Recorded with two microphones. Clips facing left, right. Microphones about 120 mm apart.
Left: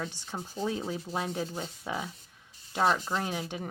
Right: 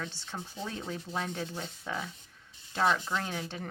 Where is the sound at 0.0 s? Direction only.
10° left (ahead or behind).